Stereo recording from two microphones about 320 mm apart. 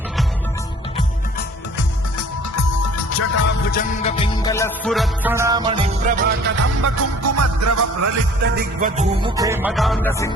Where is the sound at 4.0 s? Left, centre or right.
Centre.